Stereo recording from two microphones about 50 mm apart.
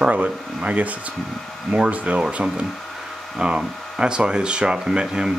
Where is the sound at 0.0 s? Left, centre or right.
Right.